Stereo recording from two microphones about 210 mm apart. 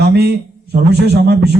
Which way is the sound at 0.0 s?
50° right (ahead or behind).